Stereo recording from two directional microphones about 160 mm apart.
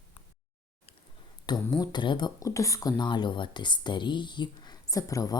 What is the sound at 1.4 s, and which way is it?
Speech, 25° left (ahead or behind).